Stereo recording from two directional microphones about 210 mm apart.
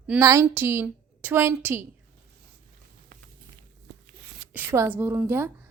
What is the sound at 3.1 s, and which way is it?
Walk, 40° right (ahead or behind).